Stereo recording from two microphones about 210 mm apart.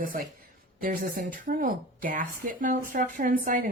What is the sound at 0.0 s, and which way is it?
Speech, 40° right (ahead or behind).